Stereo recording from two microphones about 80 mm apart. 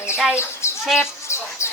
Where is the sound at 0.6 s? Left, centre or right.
Left.